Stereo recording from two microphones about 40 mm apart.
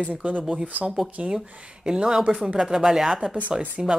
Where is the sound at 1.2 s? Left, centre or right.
Right.